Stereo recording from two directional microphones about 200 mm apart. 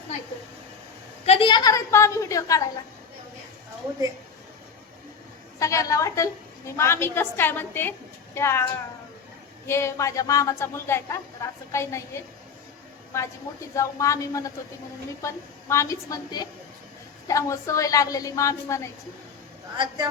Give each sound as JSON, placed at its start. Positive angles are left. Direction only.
{"t": 1.2, "sound": "a woman's voice", "side_deg": 30}
{"t": 5.5, "sound": "a woman's voice", "side_deg": 15}
{"t": 9.6, "sound": "a woman's voice", "side_deg": 15}
{"t": 19.7, "sound": "a woman's voice", "side_deg": -25}